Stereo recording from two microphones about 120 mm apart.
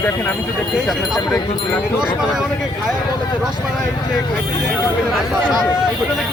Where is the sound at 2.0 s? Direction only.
5° right (ahead or behind).